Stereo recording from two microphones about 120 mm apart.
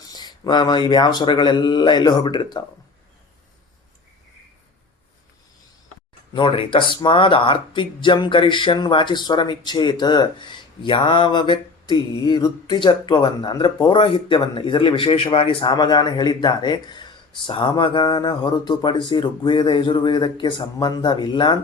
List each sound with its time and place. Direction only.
0.0 s speech: 35° left (ahead or behind)
6.3 s speech: 45° left (ahead or behind)